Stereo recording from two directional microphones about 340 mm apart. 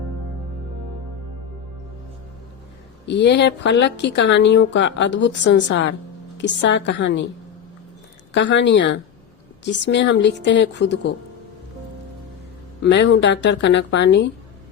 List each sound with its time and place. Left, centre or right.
3.1 s speech: left
8.3 s speech: left
12.8 s speech: left